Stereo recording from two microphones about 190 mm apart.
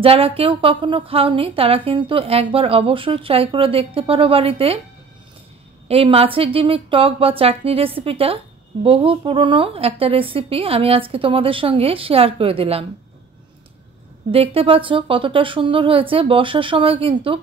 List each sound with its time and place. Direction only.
0.0 s a woman's voice: 30° right (ahead or behind)
5.9 s a woman's voice: 30° right (ahead or behind)
14.3 s a woman's voice: 30° right (ahead or behind)